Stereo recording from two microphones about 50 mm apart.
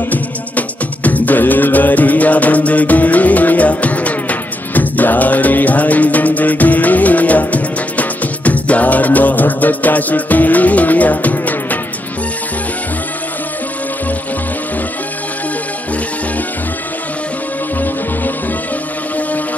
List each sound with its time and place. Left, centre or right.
0.1 s music: left